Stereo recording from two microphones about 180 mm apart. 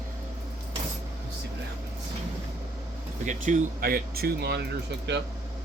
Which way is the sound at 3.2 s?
50° right (ahead or behind).